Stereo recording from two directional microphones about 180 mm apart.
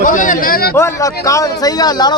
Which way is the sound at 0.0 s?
45° left (ahead or behind).